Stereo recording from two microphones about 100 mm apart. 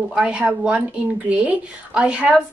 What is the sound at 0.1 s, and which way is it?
A woman's voice, 10° right (ahead or behind).